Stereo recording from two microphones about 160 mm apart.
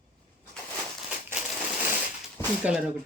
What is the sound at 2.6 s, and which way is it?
Speech, 5° right (ahead or behind).